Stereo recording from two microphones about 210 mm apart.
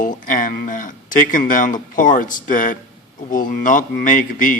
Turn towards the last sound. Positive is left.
turn(degrees=40)  # may be behind; listen again after turning